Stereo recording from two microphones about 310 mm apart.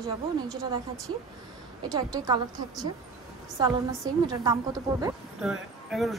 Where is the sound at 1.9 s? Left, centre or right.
Centre.